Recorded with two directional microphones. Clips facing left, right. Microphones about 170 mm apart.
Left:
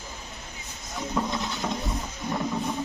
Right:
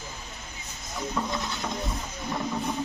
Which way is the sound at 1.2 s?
15° left (ahead or behind).